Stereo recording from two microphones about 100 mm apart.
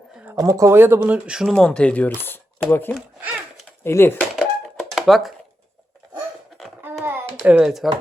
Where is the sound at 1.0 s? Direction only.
15° right (ahead or behind).